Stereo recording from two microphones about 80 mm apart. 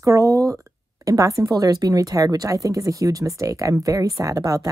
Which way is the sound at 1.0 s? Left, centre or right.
Right.